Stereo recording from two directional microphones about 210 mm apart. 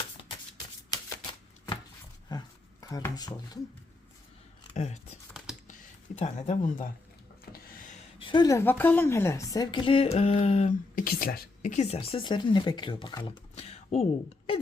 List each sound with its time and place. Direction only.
1.3 s shuffling cards: 20° left (ahead or behind)
2.8 s speech: 15° left (ahead or behind)
4.7 s speech: 35° left (ahead or behind)
6.1 s speech: 35° left (ahead or behind)
8.2 s a woman's voice: 20° left (ahead or behind)
11.9 s speech: 25° left (ahead or behind)